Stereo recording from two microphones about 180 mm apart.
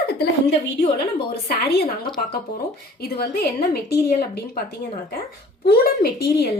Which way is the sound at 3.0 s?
60° left (ahead or behind).